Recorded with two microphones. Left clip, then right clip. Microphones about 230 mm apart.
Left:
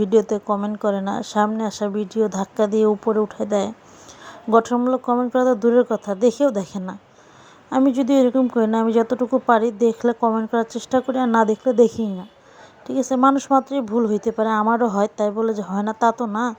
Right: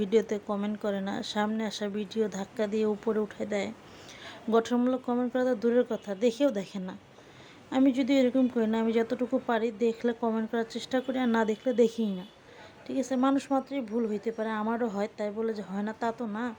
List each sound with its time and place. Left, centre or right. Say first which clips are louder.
0.0 s speech: left 9 dB; centre
3.0 s speech: left 10 dB; centre
3.2 s speech: left 10 dB; centre
11.5 s speech: left 10 dB; centre
11.8 s speech: left 7 dB; centre